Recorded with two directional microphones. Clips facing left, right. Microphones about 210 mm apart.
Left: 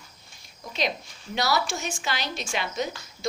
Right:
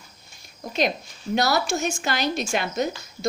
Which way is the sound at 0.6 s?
50° right (ahead or behind).